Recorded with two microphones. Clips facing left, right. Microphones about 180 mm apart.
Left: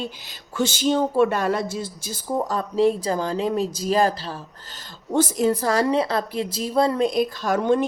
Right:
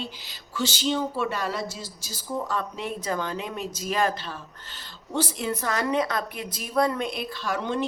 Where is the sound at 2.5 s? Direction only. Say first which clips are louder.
Left 10 dB; 35° left (ahead or behind).